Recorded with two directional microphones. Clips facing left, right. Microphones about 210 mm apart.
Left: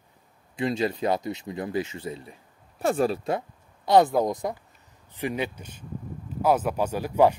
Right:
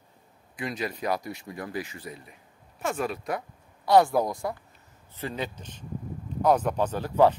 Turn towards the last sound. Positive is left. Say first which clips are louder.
# left 1 dB
turn(degrees=10)  # may be behind; listen again after turning